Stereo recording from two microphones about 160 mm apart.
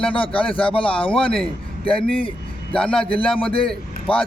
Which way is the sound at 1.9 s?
5° left (ahead or behind).